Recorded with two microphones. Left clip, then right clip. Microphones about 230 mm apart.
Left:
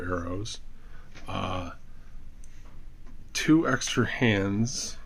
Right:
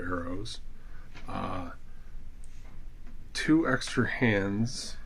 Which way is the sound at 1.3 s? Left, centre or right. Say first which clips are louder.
Left 3 dB; left.